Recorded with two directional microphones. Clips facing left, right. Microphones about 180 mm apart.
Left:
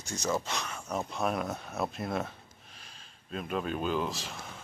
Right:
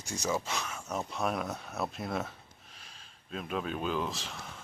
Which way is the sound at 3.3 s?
Centre (ahead or behind).